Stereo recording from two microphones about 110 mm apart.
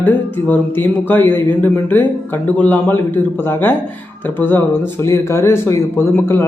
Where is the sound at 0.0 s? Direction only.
15° left (ahead or behind).